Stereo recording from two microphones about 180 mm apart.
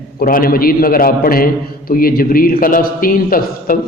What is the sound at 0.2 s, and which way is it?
A man's voice, 55° left (ahead or behind).